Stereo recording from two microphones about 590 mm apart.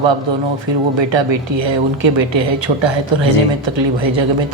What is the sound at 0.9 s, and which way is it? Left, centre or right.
A woman's voice, right.